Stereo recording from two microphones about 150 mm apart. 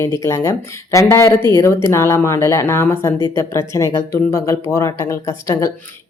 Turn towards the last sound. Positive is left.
turn(degrees=20)  # may be behind; listen again after turning